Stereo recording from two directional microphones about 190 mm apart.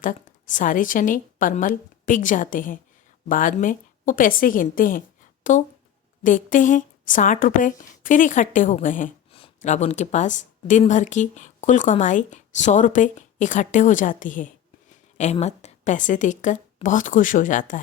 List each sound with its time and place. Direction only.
0.0 s a woman's voice: 40° left (ahead or behind)